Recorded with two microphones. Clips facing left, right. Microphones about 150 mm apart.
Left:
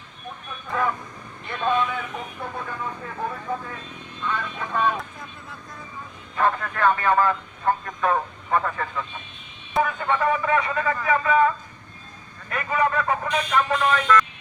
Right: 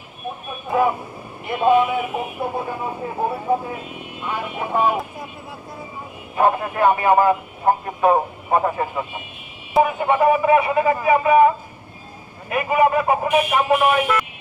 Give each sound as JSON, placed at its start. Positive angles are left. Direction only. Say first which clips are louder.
{"t": 0.3, "sound": "a sound", "louder": "right 7 dB", "side_deg": -15}
{"t": 1.5, "sound": "speech", "louder": "right 7 dB", "side_deg": -15}
{"t": 2.9, "sound": "speech", "louder": "right 7 dB", "side_deg": -25}
{"t": 3.7, "sound": "a man's voice", "louder": "right 7 dB", "side_deg": -10}